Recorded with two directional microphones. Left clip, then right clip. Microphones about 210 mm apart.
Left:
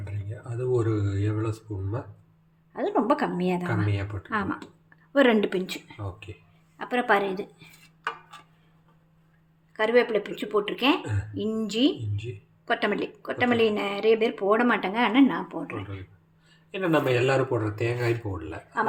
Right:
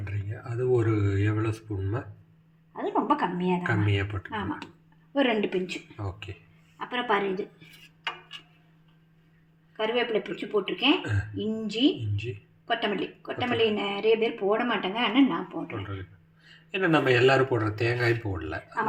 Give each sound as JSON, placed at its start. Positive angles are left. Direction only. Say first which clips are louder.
{"t": 0.0, "sound": "speech", "louder": "right 2 dB", "side_deg": 0}
{"t": 2.7, "sound": "a woman's voice", "louder": "left 2 dB", "side_deg": 30}
{"t": 3.8, "sound": "speech", "louder": "right 3 dB", "side_deg": 0}
{"t": 5.1, "sound": "speech", "louder": "left 4 dB", "side_deg": 25}
{"t": 6.9, "sound": "speech", "louder": "left 3 dB", "side_deg": 35}
{"t": 9.7, "sound": "speech", "louder": "left 5 dB", "side_deg": 25}
{"t": 16.7, "sound": "speech", "louder": "right 1 dB", "side_deg": 0}